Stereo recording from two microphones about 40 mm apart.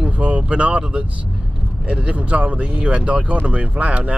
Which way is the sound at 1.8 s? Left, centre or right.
Right.